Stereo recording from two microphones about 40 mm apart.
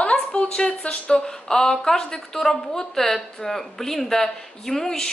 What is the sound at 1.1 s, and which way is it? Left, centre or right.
A woman's voice, centre.